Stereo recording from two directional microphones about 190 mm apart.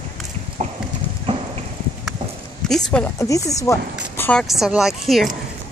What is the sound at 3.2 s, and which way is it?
Speech, 15° left (ahead or behind).